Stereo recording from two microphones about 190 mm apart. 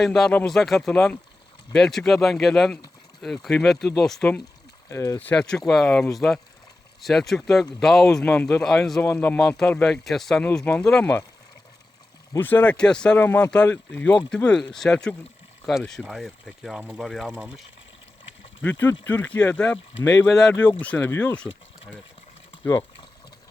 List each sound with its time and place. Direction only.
0.0 s speech: centre (ahead or behind)
12.3 s speech: 10° left (ahead or behind); by 17.6 s 5° right (ahead or behind)
18.6 s speech: 10° left (ahead or behind)
20.4 s speech: 10° left (ahead or behind)